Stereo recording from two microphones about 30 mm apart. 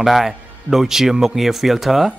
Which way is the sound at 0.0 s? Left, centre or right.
Centre.